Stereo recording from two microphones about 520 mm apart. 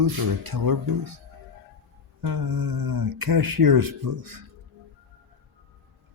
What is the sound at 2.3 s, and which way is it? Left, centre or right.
Speech, right.